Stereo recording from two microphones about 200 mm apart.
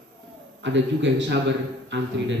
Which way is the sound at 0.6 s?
65° right (ahead or behind).